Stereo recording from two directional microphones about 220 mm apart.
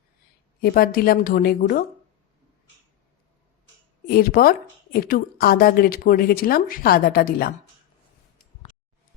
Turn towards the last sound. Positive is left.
turn(degrees=40)  # may be behind; listen again after turning